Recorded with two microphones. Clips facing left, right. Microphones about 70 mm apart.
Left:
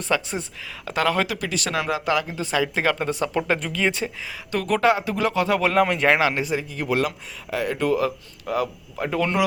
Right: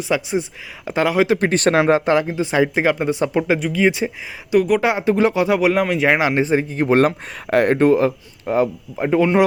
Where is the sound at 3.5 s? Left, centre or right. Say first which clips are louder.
Right 6 dB; centre.